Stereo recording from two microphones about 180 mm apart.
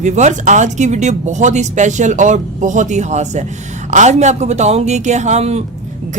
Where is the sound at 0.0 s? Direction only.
40° right (ahead or behind).